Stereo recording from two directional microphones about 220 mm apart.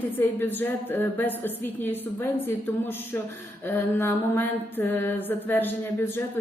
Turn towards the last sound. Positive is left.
turn(degrees=10)  # may be behind; listen again after turning